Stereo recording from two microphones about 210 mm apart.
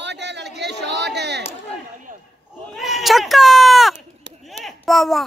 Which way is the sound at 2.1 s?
40° right (ahead or behind).